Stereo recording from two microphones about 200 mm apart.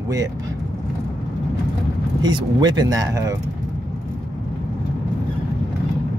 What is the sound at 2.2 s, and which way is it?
Speech, 20° right (ahead or behind).